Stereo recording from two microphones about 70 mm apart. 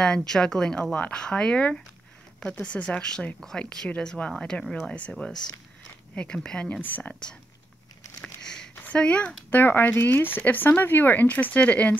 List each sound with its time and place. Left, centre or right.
0.0 s speech: centre
5.2 s speech: centre
8.2 s a sound: centre
8.8 s speech: centre